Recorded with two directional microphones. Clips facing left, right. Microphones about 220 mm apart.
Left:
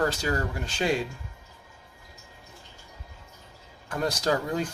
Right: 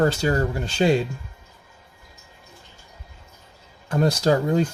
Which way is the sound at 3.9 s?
30° right (ahead or behind).